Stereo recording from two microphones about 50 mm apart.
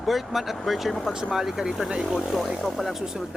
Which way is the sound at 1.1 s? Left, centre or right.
Centre.